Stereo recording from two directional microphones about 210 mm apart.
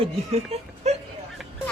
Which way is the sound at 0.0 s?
30° right (ahead or behind).